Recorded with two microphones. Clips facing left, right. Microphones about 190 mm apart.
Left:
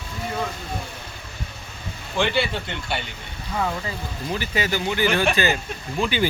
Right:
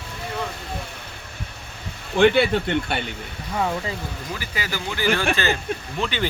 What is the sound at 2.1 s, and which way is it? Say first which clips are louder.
Speech: right 7 dB; 55° right (ahead or behind).